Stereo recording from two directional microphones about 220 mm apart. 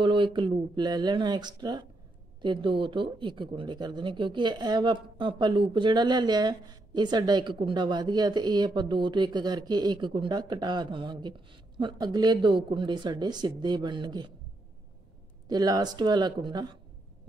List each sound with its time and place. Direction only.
0.0 s speech: 20° right (ahead or behind)
15.4 s speech: 20° right (ahead or behind)